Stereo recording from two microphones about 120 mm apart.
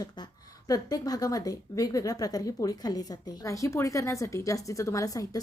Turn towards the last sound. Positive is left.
turn(degrees=30)  # may be behind; listen again after turning